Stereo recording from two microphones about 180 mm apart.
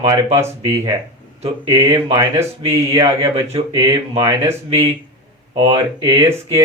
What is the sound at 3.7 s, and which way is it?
Speech, 20° right (ahead or behind).